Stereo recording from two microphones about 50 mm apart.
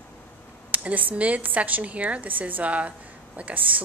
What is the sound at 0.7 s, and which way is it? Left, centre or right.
A woman's voice, right.